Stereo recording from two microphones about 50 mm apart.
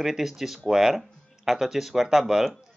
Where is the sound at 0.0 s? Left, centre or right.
Centre.